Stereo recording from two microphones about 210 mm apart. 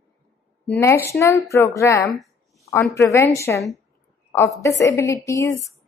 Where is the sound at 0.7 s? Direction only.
10° left (ahead or behind).